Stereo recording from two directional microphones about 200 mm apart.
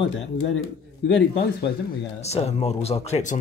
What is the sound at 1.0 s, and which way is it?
Speech, 60° left (ahead or behind).